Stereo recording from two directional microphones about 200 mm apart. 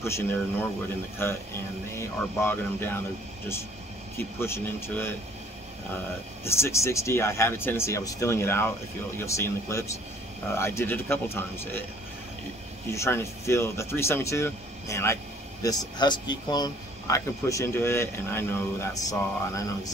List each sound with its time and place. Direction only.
0.0 s speech: 10° left (ahead or behind)
4.4 s speech: 10° left (ahead or behind)
6.4 s speech: 15° left (ahead or behind)
12.9 s speech: 15° left (ahead or behind)